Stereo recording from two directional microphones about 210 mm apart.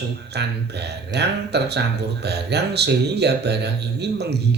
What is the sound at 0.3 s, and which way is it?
Speech, 50° right (ahead or behind).